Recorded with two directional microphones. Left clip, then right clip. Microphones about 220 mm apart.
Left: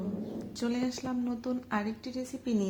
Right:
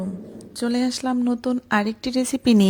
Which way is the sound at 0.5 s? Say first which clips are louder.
Right 10 dB; 35° right (ahead or behind).